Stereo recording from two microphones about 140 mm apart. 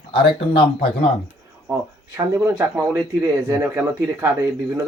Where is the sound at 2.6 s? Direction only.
15° right (ahead or behind).